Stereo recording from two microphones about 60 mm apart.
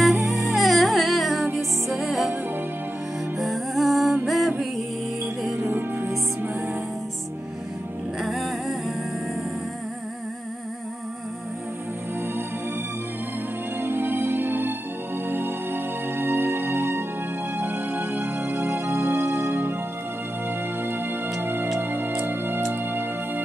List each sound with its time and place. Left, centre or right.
0.0 s music: centre
3.3 s music: centre
5.7 s music: right
8.2 s music: centre
13.7 s music: right